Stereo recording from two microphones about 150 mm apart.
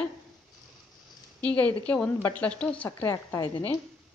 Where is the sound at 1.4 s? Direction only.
10° left (ahead or behind).